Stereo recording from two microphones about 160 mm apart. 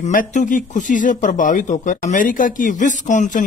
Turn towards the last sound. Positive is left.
turn(degrees=50)  # may be behind; listen again after turning